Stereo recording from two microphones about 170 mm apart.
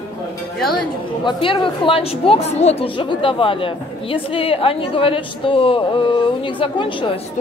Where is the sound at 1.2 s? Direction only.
30° left (ahead or behind).